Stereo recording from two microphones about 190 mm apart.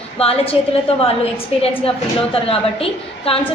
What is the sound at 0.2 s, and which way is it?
A woman's voice, 30° left (ahead or behind).